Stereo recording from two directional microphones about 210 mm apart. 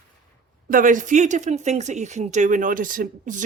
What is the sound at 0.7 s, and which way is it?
Speech, 40° right (ahead or behind).